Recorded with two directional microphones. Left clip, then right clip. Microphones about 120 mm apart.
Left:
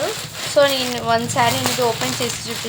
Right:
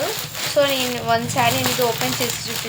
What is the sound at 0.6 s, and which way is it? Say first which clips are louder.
Speech: left 3 dB; 40° left (ahead or behind).